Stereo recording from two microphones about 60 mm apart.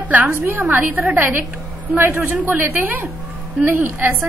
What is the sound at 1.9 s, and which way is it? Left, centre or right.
A woman's voice, right.